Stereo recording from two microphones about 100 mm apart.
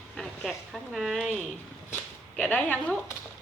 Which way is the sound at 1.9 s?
15° left (ahead or behind).